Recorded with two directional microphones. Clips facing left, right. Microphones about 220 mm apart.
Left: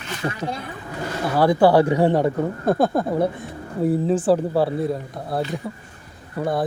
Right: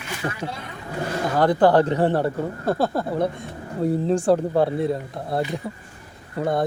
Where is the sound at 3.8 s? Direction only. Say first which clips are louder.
Left 1 dB; 5° left (ahead or behind).